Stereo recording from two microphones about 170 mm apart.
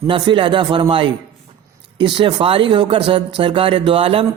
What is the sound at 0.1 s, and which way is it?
A man's voice, 30° right (ahead or behind).